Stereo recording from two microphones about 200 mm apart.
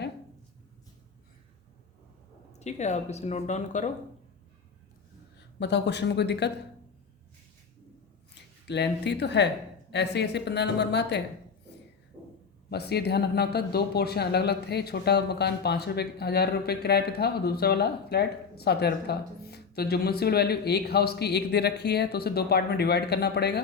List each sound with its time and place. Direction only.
2.5 s speech: 35° left (ahead or behind)
5.5 s a woman's voice: 60° left (ahead or behind)
8.4 s a woman's voice: 60° left (ahead or behind)
12.7 s speech: 55° left (ahead or behind)